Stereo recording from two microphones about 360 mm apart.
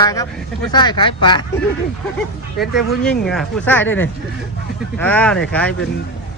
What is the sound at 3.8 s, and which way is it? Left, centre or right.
Speech, left.